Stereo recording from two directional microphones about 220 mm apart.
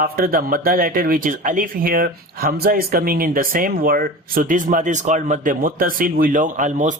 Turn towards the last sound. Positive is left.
turn(degrees=-35)  # may be behind; listen again after turning